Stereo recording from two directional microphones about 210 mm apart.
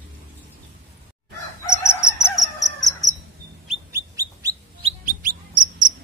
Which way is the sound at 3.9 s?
15° right (ahead or behind).